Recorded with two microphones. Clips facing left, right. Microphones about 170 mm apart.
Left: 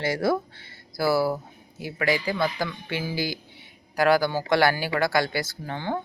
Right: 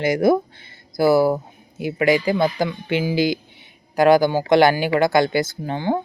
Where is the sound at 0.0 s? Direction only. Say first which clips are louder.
Right 7 dB; 15° right (ahead or behind).